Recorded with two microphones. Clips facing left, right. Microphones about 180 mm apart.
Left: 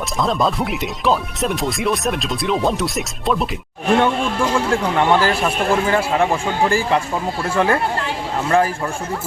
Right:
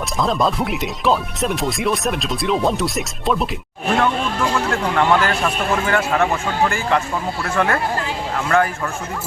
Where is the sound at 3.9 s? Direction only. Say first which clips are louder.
Left 2 dB; 30° left (ahead or behind).